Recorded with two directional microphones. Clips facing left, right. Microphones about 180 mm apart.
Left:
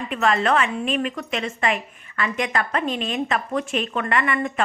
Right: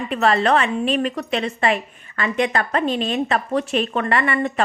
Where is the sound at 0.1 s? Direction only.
35° right (ahead or behind).